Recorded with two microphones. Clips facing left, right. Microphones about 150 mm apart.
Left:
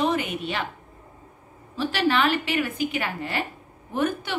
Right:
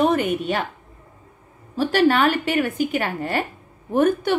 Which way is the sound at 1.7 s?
45° right (ahead or behind).